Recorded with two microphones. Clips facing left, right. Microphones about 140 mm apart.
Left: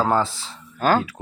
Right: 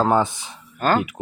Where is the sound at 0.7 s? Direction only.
5° left (ahead or behind).